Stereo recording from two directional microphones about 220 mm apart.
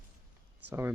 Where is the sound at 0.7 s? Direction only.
10° right (ahead or behind).